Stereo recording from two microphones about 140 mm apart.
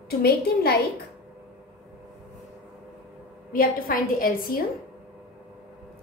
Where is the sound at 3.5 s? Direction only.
90° left.